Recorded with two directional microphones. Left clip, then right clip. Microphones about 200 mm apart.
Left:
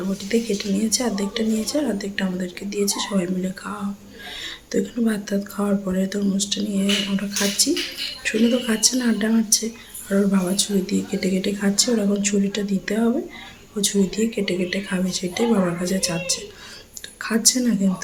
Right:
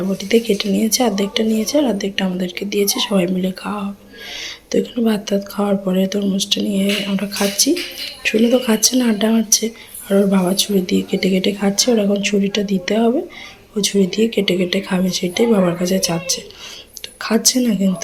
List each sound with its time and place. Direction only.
0.3 s speech: 25° right (ahead or behind)